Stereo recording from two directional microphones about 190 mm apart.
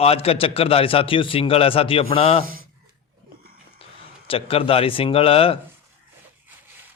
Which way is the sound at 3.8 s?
30° left (ahead or behind).